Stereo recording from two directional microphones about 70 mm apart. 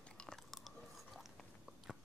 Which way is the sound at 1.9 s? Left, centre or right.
Centre.